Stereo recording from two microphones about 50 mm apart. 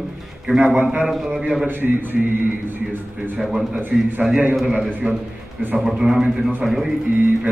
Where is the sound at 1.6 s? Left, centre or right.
Right.